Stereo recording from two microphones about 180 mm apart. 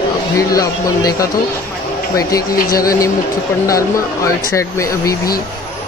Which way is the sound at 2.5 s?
55° left (ahead or behind).